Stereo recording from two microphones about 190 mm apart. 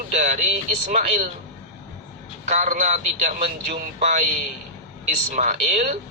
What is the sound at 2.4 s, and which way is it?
Speech, 40° right (ahead or behind).